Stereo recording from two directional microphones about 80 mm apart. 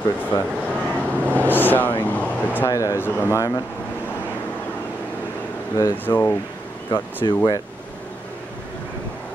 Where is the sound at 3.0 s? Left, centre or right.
Left.